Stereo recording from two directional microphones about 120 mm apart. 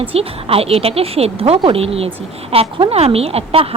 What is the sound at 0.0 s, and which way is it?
A woman's voice, 55° right (ahead or behind).